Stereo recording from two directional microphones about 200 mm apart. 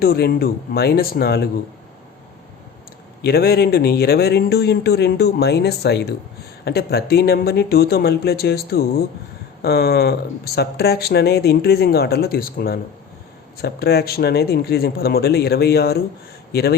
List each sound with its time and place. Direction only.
0.0 s speech: 50° left (ahead or behind)
3.2 s speech: 50° left (ahead or behind)